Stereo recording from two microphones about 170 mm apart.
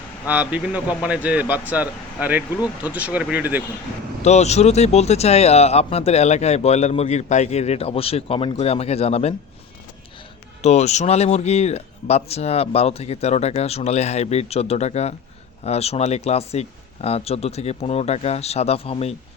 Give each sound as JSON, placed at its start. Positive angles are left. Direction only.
{"t": 0.3, "sound": "speech", "side_deg": -10}
{"t": 4.2, "sound": "speech", "side_deg": 40}
{"t": 10.6, "sound": "speech", "side_deg": 40}